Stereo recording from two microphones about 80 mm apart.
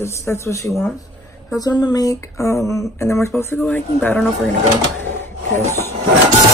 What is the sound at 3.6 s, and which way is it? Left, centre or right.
Speech, left.